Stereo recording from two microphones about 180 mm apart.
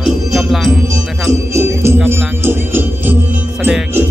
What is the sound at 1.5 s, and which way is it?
Music, 15° right (ahead or behind).